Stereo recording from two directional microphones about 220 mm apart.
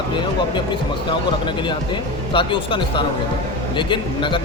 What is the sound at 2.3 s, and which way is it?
Speech, 20° left (ahead or behind).